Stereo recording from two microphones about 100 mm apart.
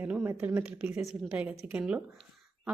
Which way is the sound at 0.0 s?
20° right (ahead or behind).